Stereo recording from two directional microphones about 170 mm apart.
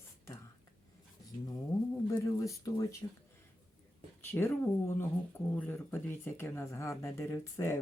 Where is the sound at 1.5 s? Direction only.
15° left (ahead or behind).